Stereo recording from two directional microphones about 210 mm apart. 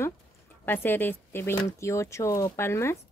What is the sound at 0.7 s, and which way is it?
Speech, 10° left (ahead or behind).